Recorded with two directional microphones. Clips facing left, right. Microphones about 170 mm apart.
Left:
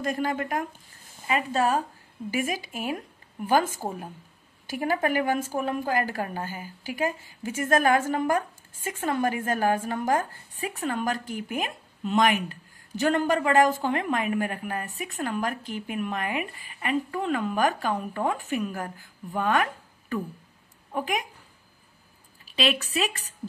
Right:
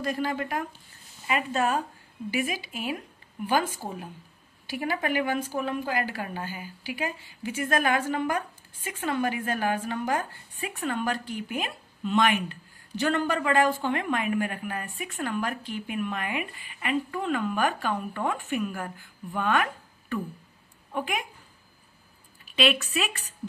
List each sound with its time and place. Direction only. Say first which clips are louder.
0.0 s a woman's voice: left 1 dB; 45° left (ahead or behind)
1.2 s a woman's voice: left 2 dB; 35° left (ahead or behind)
4.6 s a woman's voice: left 3 dB; 45° left (ahead or behind)
22.4 s a woman's voice: right 1 dB; 35° left (ahead or behind)